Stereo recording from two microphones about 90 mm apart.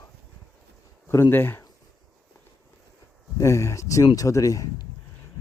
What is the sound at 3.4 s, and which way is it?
Speech, 30° left (ahead or behind).